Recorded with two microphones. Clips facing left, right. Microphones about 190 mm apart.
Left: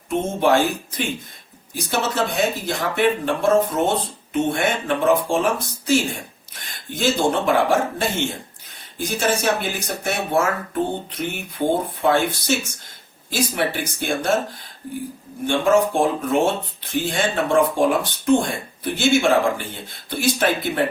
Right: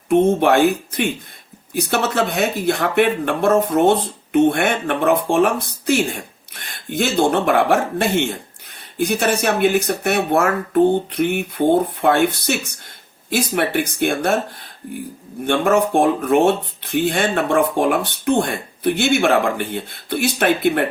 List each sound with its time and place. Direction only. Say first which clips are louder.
0.1 s speech: right 5 dB; 60° right (ahead or behind)
15.4 s speech: right 1 dB; 60° right (ahead or behind)